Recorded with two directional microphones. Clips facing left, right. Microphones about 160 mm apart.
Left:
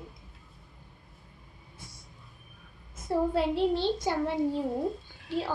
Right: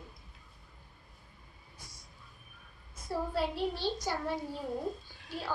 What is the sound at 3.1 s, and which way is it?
Speech, 20° left (ahead or behind).